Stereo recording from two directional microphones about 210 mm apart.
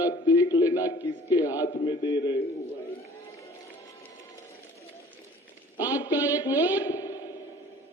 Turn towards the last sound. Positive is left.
turn(degrees=20)  # may be behind; listen again after turning